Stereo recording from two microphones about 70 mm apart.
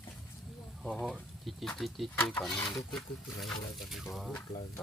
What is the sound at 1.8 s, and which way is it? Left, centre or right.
Speech, centre.